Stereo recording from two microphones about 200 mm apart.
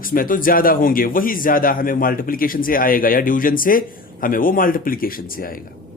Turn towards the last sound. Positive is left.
turn(degrees=45)  # may be behind; listen again after turning